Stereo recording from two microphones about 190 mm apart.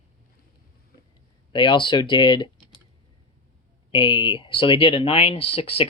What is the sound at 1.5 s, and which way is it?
Speech, 25° left (ahead or behind).